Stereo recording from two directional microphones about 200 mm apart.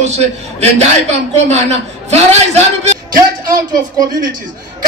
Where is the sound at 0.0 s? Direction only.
35° right (ahead or behind).